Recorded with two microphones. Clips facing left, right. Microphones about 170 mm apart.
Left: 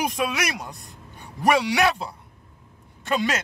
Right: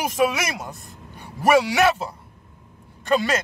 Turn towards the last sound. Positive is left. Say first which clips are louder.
# right 4 dB
turn(degrees=0)  # may be behind; listen again after turning